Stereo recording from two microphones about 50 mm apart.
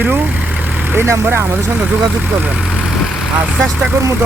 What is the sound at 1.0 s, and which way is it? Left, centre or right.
Speech, right.